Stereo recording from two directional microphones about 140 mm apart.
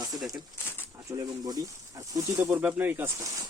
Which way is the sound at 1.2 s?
25° right (ahead or behind).